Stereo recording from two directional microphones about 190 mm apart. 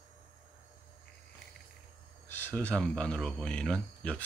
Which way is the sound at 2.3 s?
10° left (ahead or behind).